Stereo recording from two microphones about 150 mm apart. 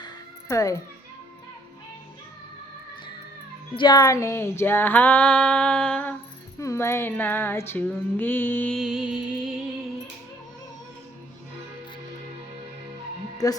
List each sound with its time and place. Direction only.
0.0 s music: 20° left (ahead or behind)
3.8 s female singing: 30° left (ahead or behind); by 6.1 s 10° left (ahead or behind)
6.6 s female singing: 20° left (ahead or behind)
8.7 s music: centre (ahead or behind)
13.4 s a woman's voice: 25° left (ahead or behind)